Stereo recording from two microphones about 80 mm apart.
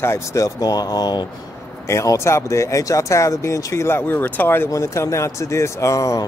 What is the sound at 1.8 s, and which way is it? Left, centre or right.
Speech, left.